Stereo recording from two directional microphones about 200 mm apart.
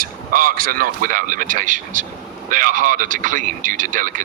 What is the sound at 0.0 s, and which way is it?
Speech, 45° right (ahead or behind).